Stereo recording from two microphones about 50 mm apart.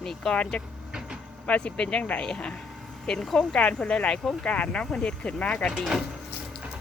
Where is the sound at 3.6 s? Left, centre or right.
Left.